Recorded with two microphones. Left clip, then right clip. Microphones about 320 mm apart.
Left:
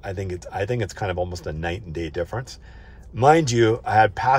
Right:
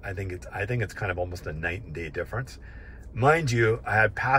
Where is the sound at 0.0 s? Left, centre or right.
Centre.